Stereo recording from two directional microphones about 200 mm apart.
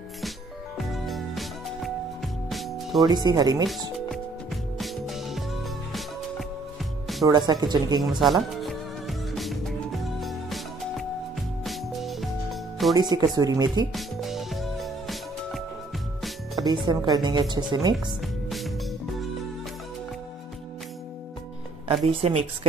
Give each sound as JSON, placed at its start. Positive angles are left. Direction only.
{"t": 0.7, "sound": "music", "side_deg": 0}
{"t": 3.1, "sound": "speech", "side_deg": -20}
{"t": 4.1, "sound": "music", "side_deg": 0}
{"t": 6.8, "sound": "music", "side_deg": 0}
{"t": 7.2, "sound": "speech", "side_deg": -20}
{"t": 8.2, "sound": "music", "side_deg": 0}
{"t": 12.9, "sound": "speech", "side_deg": -20}
{"t": 13.9, "sound": "music", "side_deg": 0}
{"t": 16.6, "sound": "speech", "side_deg": -20}
{"t": 18.2, "sound": "music", "side_deg": 0}
{"t": 22.0, "sound": "speech", "side_deg": -30}